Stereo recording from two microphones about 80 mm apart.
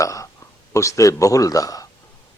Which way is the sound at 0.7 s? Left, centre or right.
Left.